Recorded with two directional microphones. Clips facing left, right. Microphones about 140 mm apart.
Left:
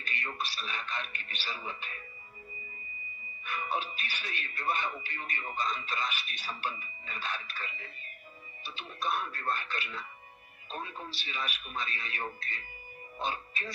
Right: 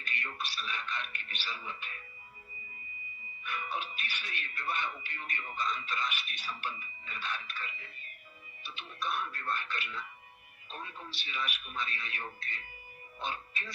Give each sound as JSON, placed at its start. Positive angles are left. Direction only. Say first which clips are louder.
{"t": 0.0, "sound": "speech", "louder": "left 3 dB", "side_deg": 35}
{"t": 3.4, "sound": "speech", "louder": "left 3 dB", "side_deg": 35}